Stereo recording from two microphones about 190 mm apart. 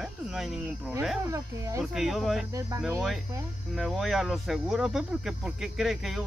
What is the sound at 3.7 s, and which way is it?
Speech, centre (ahead or behind).